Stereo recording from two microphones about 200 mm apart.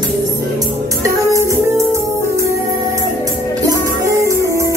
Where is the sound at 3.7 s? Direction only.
15° right (ahead or behind).